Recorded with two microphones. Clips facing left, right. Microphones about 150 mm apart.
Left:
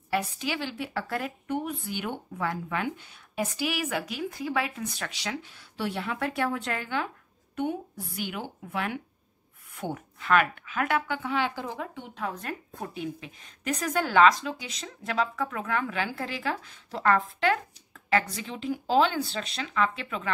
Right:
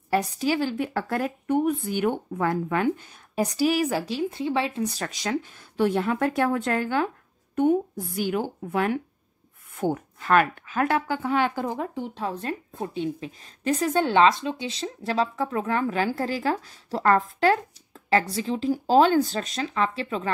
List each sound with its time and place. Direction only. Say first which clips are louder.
0.1 s speech: right 6 dB; 40° right (ahead or behind)